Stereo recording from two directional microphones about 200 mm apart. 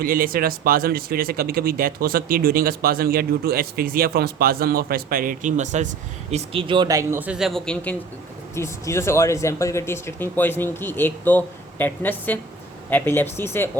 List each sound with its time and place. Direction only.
0.0 s speech: 45° right (ahead or behind); by 13.7 s 10° left (ahead or behind)